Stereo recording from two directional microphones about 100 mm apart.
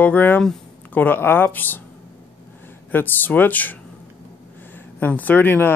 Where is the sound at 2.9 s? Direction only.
20° left (ahead or behind).